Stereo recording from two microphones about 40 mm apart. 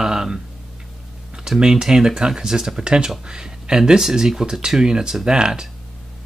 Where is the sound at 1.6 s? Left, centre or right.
Centre.